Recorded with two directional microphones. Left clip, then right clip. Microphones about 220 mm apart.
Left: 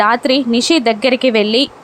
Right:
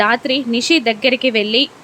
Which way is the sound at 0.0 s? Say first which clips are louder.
Left 3 dB; 10° left (ahead or behind).